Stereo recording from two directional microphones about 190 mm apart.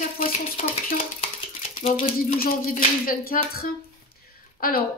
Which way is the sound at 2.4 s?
50° left (ahead or behind).